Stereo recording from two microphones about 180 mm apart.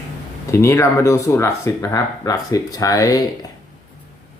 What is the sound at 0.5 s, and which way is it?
Speech, 15° left (ahead or behind).